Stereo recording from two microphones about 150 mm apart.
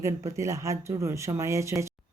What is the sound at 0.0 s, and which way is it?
Speech, 20° right (ahead or behind).